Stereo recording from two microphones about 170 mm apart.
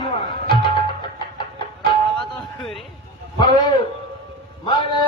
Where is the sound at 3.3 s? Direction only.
25° left (ahead or behind).